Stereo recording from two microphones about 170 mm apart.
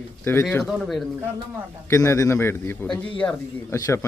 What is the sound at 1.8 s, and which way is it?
A man's voice, 20° left (ahead or behind).